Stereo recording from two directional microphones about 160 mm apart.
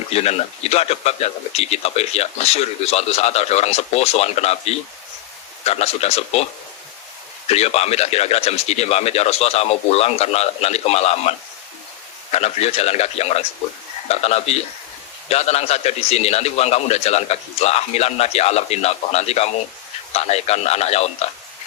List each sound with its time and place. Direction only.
0.1 s speech: 40° left (ahead or behind)